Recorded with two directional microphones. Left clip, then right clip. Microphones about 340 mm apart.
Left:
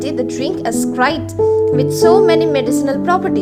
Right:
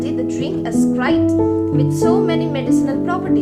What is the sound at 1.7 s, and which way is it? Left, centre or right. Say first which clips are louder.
Speech: left 5 dB; centre.